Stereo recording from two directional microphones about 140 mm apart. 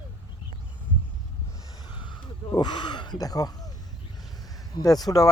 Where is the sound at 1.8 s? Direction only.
35° left (ahead or behind).